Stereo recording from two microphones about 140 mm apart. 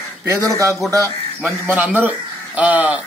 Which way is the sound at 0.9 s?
20° right (ahead or behind).